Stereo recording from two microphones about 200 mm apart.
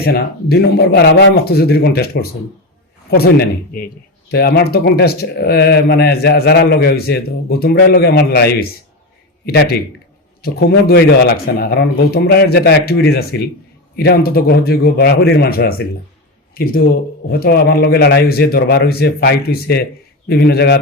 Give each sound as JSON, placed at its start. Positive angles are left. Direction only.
{"t": 0.0, "sound": "speech", "side_deg": 50}
{"t": 17.3, "sound": "speech", "side_deg": 50}